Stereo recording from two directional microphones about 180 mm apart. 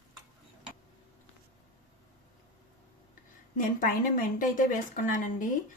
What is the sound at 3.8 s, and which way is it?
A woman's voice, 50° left (ahead or behind).